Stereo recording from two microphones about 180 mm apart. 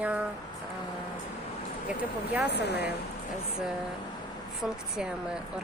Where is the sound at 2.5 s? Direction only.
70° left (ahead or behind).